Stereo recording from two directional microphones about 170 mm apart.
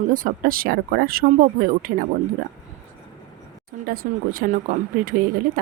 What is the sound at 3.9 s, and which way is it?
Speech, 55° right (ahead or behind).